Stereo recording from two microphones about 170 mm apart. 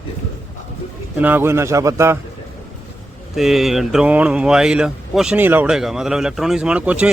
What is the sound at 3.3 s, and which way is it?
Speech, centre (ahead or behind).